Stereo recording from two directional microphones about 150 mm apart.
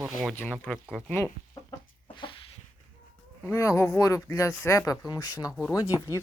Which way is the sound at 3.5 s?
20° left (ahead or behind).